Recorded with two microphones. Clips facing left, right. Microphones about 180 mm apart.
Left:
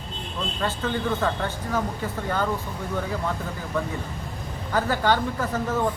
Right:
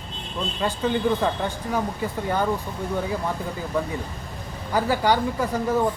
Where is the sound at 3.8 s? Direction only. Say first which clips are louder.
Right 1 dB; 15° right (ahead or behind).